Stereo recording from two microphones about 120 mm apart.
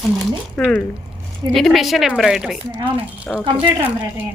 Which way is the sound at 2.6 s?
40° right (ahead or behind).